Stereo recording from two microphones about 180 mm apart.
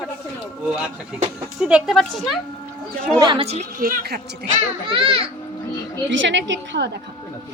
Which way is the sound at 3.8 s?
60° right (ahead or behind).